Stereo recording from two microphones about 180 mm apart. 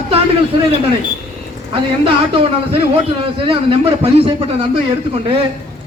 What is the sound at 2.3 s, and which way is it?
A man's voice, 30° right (ahead or behind).